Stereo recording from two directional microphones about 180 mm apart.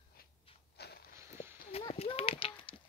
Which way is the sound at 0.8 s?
65° left (ahead or behind).